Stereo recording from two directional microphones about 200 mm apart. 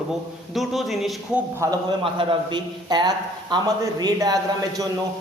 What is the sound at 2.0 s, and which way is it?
A man's voice, 25° right (ahead or behind).